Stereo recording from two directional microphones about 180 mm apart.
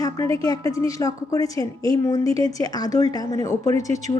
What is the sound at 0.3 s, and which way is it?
A woman's voice, 20° left (ahead or behind).